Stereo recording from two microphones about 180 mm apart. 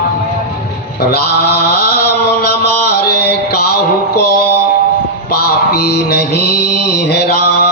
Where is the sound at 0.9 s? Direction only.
60° left (ahead or behind).